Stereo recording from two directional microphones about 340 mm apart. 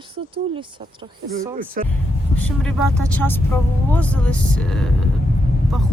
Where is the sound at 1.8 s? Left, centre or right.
Right.